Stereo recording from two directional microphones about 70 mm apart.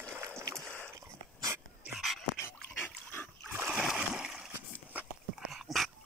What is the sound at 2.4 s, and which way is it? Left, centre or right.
Dog, left.